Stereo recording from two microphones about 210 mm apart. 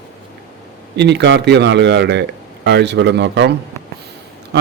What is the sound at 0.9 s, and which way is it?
Speech, 55° right (ahead or behind).